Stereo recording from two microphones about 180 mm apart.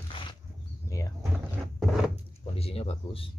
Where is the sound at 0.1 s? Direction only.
25° left (ahead or behind).